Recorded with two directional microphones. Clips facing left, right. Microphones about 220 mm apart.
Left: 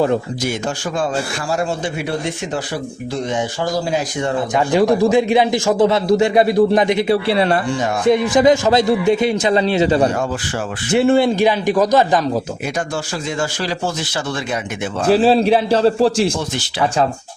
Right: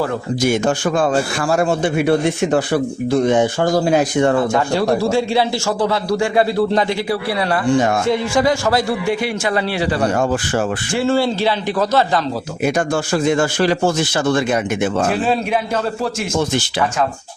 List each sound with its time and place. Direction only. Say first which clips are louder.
1.5 s speech: right 5 dB; 55° right (ahead or behind)
4.5 s a man's voice: left 2 dB; 15° left (ahead or behind)
13.2 s a man's voice: right 8 dB; 55° right (ahead or behind)
15.1 s a man's voice: left 6 dB; 30° left (ahead or behind)